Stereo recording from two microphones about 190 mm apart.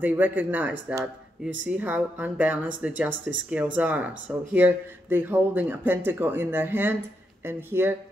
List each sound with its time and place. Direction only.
0.0 s speech: 10° right (ahead or behind)